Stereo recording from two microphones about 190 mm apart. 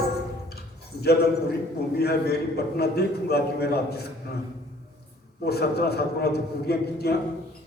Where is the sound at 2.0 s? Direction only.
55° left (ahead or behind).